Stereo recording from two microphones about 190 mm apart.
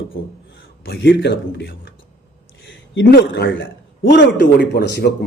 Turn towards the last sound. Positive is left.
turn(degrees=55)  # may be behind; listen again after turning